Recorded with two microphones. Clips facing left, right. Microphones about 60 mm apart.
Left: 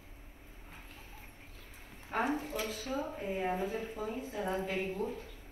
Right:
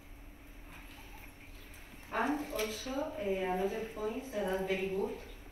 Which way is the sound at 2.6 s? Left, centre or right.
Left.